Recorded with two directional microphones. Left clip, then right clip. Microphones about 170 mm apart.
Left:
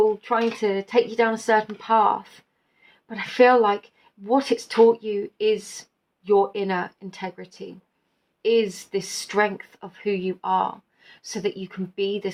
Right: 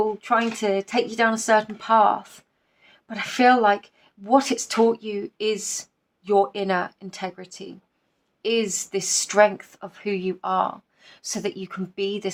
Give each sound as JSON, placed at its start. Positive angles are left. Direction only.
{"t": 0.2, "sound": "a woman's voice", "side_deg": -45}